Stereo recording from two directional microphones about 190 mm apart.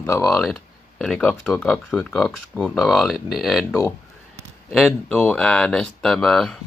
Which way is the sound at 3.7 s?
15° left (ahead or behind).